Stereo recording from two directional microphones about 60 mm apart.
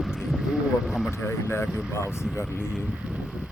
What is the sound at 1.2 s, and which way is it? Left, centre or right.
Speech, left.